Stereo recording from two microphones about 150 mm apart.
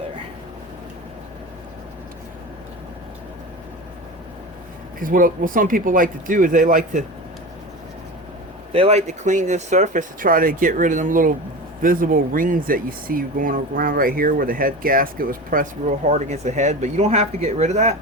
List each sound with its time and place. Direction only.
4.9 s speech: 65° right (ahead or behind)
8.7 s speech: 45° right (ahead or behind)